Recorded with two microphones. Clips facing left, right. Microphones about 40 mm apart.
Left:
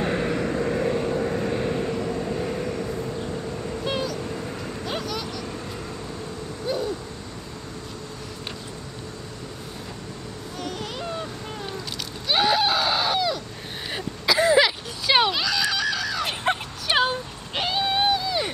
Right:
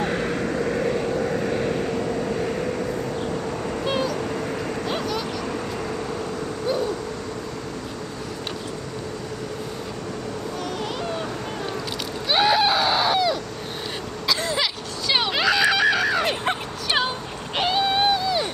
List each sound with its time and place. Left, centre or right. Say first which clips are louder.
0.0 s vehicle: even; centre; by 3.8 s right
3.8 s vehicle: right 3 dB; centre
4.2 s vehicle: right 5 dB; right
4.8 s vehicle: right 1 dB; centre
10.6 s vehicle: right 1 dB; centre
12.3 s a sound: right 2 dB; centre
14.2 s throat clearing: left 6 dB; centre
15.3 s a sound: right 5 dB; right
16.3 s music: right 1 dB; centre
17.6 s a sound: right 3 dB; centre